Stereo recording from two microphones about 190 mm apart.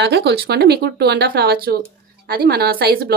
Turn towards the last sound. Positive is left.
turn(degrees=-55)  # may be behind; listen again after turning